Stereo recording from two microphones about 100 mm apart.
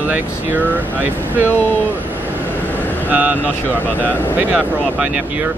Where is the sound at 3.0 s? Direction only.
15° right (ahead or behind).